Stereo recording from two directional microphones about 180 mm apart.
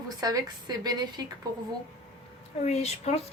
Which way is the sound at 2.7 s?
35° left (ahead or behind).